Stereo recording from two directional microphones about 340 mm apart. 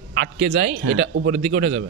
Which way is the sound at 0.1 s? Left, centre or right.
Right.